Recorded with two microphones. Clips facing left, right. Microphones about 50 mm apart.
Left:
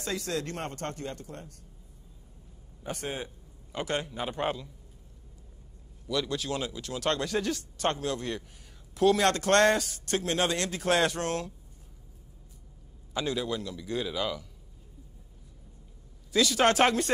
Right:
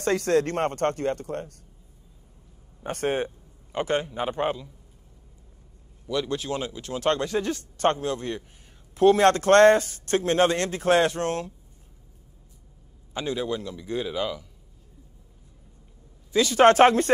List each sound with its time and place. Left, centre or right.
0.0 s speech: right
2.8 s speech: right
3.7 s speech: right
6.0 s a man's voice: right
13.1 s speech: right
16.3 s a man's voice: right